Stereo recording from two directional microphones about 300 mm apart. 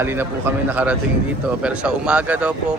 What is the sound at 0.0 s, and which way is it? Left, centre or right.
A man's voice, centre.